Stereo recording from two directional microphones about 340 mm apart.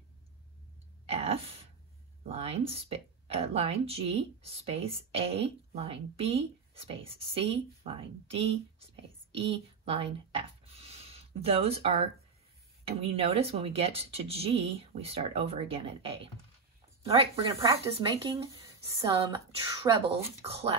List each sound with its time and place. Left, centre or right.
1.0 s speech: centre
9.3 s a sound: centre
11.4 s speech: centre
13.1 s speech: centre